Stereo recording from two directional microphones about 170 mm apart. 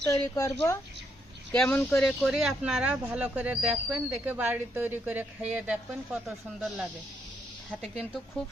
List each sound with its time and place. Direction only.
0.1 s speech: 15° left (ahead or behind)
1.5 s speech: 10° left (ahead or behind)